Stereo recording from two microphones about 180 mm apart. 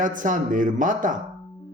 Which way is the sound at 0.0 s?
50° right (ahead or behind).